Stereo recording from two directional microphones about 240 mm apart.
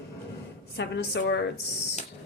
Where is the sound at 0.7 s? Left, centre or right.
Left.